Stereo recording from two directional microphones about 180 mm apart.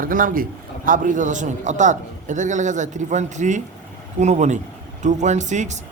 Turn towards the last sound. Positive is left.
turn(degrees=-40)  # may be behind; listen again after turning